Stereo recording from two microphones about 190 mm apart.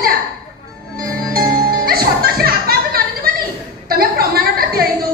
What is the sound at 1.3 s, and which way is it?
Music, 50° right (ahead or behind).